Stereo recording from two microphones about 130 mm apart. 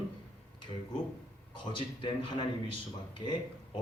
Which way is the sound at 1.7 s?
40° left (ahead or behind).